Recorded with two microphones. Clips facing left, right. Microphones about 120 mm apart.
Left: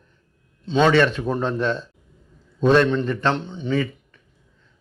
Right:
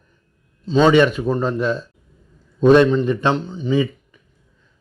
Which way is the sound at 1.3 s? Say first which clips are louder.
Right 3 dB; centre (ahead or behind).